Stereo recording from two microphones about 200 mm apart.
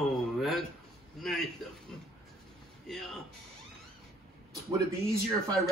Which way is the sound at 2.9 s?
Centre (ahead or behind).